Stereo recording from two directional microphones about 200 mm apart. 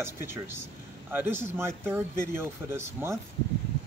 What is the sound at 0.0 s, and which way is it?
Speech, 10° right (ahead or behind).